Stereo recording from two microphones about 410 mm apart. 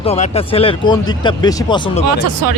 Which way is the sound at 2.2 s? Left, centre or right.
Right.